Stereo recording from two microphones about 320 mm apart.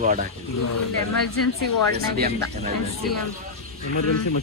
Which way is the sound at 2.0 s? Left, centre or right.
Right.